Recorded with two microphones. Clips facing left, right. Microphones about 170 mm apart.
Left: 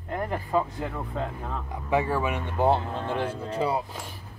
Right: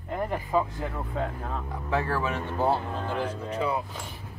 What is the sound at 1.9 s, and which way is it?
Speech, 15° left (ahead or behind).